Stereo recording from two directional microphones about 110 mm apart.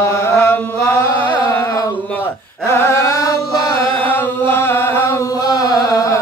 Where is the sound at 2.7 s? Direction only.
25° left (ahead or behind).